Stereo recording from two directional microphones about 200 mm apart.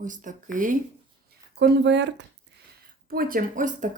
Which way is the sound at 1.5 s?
60° right (ahead or behind).